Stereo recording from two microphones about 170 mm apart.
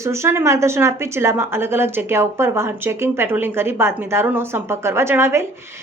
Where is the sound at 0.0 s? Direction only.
15° right (ahead or behind).